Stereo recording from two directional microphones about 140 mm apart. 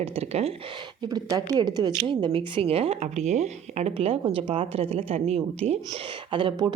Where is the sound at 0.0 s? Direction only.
45° right (ahead or behind).